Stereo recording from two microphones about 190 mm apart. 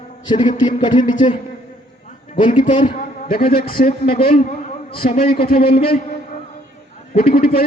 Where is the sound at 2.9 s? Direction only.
50° left (ahead or behind).